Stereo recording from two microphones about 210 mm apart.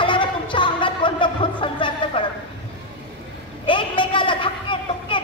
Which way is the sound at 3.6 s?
25° left (ahead or behind).